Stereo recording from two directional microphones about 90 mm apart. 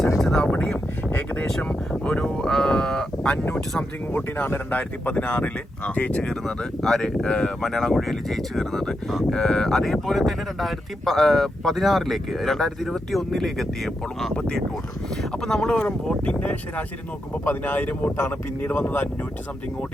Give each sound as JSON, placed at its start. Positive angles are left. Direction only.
{"t": 0.2, "sound": "speech", "side_deg": 5}
{"t": 1.5, "sound": "speech", "side_deg": 5}
{"t": 4.1, "sound": "speech", "side_deg": 25}